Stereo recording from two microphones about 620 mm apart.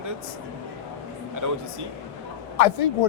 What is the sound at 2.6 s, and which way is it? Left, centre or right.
Snicker, left.